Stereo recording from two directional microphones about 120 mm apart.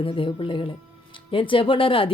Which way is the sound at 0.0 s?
45° left (ahead or behind).